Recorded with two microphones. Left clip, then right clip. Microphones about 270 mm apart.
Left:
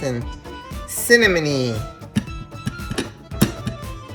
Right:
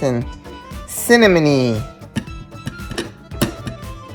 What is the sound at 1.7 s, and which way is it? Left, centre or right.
Music, centre.